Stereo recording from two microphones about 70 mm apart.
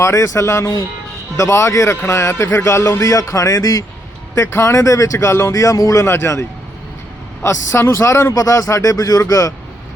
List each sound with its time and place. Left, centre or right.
0.0 s a man's voice: left
4.4 s a man's voice: left
5.1 s a man's voice: left
6.1 s speech: left
7.4 s a man's voice: left